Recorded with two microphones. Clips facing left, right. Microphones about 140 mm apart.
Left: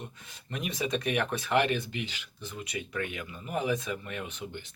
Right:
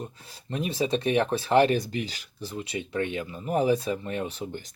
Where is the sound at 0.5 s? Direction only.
30° right (ahead or behind).